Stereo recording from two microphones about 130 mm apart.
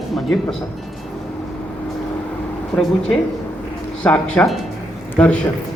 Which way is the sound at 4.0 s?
10° left (ahead or behind).